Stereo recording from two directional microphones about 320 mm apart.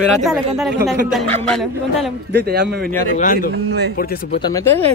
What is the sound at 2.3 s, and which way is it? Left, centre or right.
Speech, right.